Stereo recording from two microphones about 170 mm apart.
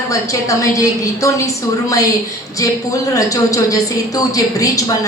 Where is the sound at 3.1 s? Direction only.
20° left (ahead or behind).